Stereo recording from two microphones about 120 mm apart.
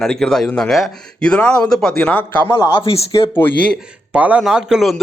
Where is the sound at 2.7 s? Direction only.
50° left (ahead or behind).